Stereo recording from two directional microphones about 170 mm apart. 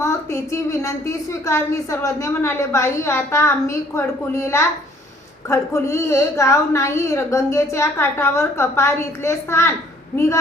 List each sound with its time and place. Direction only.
0.0 s a woman's voice: 15° left (ahead or behind)